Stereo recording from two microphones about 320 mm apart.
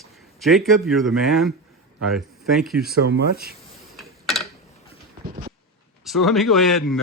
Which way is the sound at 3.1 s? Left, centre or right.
Right.